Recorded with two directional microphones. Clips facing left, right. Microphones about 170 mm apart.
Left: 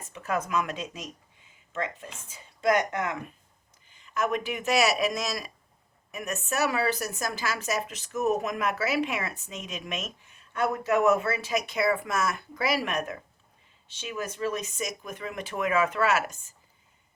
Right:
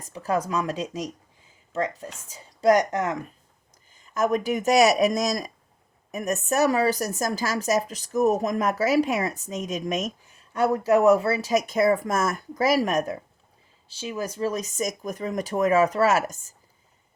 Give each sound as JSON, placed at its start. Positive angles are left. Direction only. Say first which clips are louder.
{"t": 0.0, "sound": "a woman's voice", "louder": "right 4 dB", "side_deg": -35}